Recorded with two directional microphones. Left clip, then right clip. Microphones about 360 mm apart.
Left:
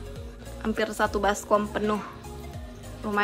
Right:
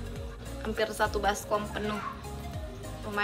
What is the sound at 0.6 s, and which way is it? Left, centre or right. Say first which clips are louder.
A woman's voice: left 3 dB; centre.